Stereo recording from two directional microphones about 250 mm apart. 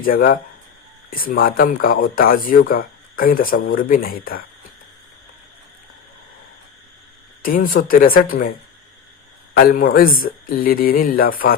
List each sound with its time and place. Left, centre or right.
0.0 s speech: left
7.4 s speech: left
9.6 s speech: left